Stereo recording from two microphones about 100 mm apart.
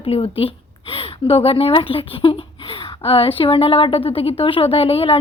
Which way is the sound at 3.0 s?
75° left (ahead or behind).